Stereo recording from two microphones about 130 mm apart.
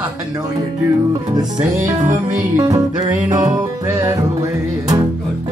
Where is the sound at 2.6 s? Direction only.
30° right (ahead or behind).